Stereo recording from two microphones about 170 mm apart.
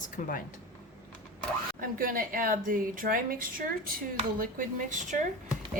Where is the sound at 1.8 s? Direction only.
55° right (ahead or behind).